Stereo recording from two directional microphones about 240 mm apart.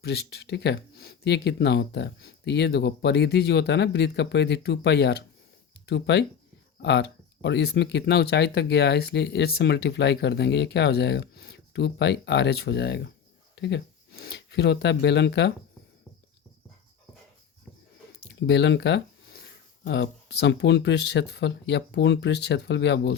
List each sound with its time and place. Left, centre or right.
0.0 s speech: left
18.3 s speech: left